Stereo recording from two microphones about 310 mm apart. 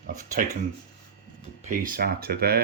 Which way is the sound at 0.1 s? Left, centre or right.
Right.